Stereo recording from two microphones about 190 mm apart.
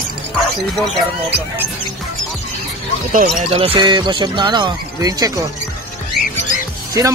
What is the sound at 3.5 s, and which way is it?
Speech, 30° right (ahead or behind).